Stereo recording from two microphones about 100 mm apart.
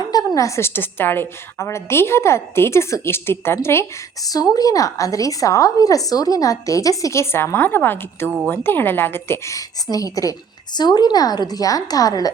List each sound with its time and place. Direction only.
0.3 s a woman's voice: 30° left (ahead or behind)
4.3 s a woman's voice: 40° left (ahead or behind)